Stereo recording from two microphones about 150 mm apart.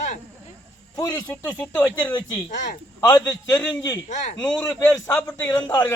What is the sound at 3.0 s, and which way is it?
Speech, 25° left (ahead or behind).